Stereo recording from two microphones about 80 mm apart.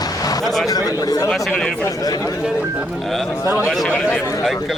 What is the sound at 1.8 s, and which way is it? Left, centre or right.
Speech, left.